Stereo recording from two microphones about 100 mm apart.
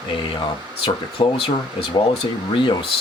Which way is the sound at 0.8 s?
60° left (ahead or behind).